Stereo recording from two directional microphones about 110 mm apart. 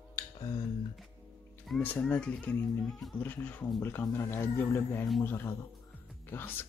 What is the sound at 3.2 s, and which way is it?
Speech, 15° left (ahead or behind).